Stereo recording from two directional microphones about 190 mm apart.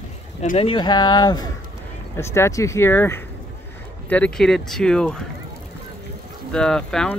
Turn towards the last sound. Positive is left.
turn(degrees=5)  # may be behind; listen again after turning